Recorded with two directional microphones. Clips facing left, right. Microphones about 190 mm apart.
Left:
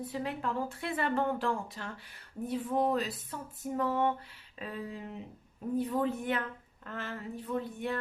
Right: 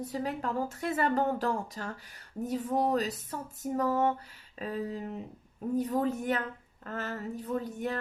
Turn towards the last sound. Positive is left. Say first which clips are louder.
# right 1 dB
turn(degrees=-40)  # may be behind; listen again after turning